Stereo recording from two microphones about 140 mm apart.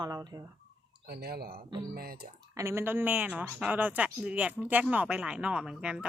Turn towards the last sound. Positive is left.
turn(degrees=-5)  # may be behind; listen again after turning